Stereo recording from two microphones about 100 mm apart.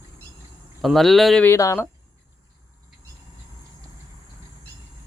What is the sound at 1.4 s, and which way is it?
Speech, 30° left (ahead or behind).